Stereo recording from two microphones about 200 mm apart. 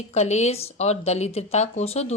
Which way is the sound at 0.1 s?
35° left (ahead or behind).